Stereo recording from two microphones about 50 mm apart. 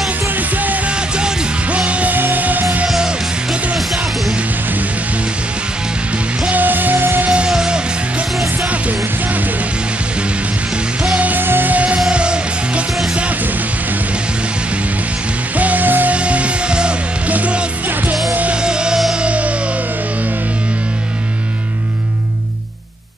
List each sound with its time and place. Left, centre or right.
0.4 s music: right
0.8 s music: right
2.1 s music: right
6.5 s music: right
7.4 s music: centre
8.6 s music: right
11.1 s music: right
11.4 s music: right
11.7 s music: right
15.5 s music: right
16.2 s music: right
18.6 s music: centre